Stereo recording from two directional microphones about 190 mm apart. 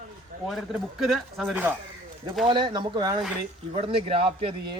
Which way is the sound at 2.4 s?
25° right (ahead or behind).